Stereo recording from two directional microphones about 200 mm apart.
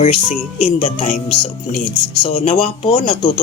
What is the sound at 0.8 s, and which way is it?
Speech, 40° left (ahead or behind).